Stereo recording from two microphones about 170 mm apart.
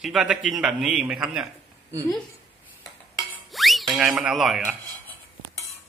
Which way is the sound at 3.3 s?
Centre (ahead or behind).